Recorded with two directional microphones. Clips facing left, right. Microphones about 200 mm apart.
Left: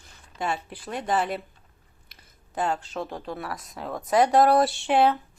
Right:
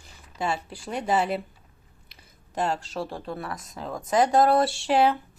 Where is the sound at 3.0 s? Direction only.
30° right (ahead or behind).